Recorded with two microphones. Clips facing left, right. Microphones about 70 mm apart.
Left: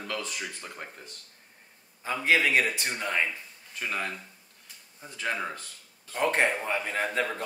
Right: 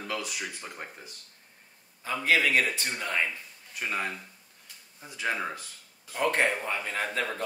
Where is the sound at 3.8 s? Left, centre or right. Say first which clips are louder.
Right 1 dB; centre.